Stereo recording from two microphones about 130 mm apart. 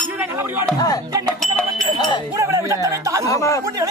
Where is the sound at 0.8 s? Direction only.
30° left (ahead or behind).